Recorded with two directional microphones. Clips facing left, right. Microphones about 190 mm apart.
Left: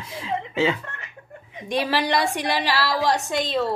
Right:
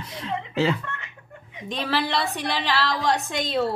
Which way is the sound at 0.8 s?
35° left (ahead or behind).